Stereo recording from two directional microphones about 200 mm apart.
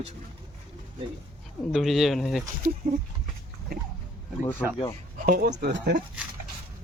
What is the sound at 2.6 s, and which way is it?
Speech, 45° right (ahead or behind).